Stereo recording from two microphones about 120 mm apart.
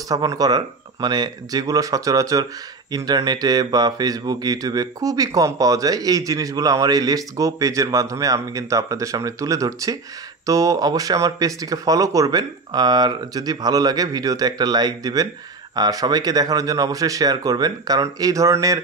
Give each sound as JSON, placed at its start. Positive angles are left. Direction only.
{"t": 0.1, "sound": "speech", "side_deg": -30}